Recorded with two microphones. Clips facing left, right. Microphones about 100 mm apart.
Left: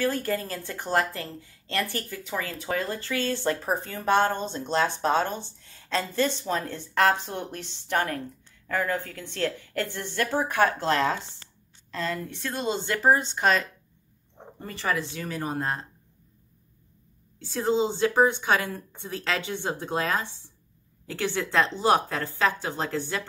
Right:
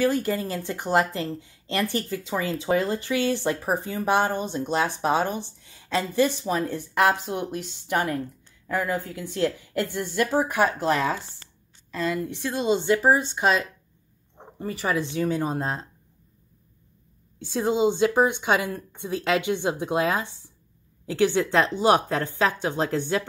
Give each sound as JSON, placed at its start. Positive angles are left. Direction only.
{"t": 0.0, "sound": "a woman's voice", "side_deg": -15}
{"t": 17.4, "sound": "a woman's voice", "side_deg": -15}